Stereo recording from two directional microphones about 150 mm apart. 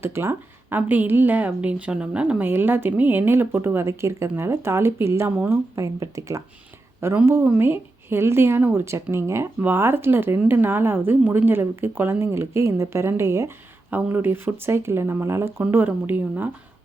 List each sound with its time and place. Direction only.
0.0 s speech: 15° right (ahead or behind)